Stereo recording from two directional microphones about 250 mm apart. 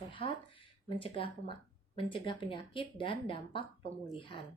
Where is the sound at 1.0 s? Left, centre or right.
Left.